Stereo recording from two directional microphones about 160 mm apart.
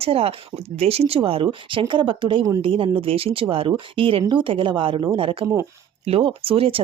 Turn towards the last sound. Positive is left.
turn(degrees=-35)  # may be behind; listen again after turning